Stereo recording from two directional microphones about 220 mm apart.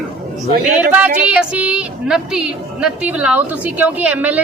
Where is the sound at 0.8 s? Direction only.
5° right (ahead or behind).